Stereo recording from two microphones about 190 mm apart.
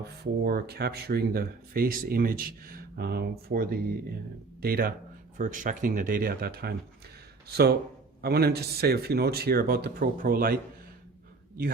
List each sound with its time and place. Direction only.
0.0 s speech: 55° right (ahead or behind)